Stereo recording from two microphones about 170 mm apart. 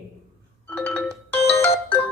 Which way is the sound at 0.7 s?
10° left (ahead or behind).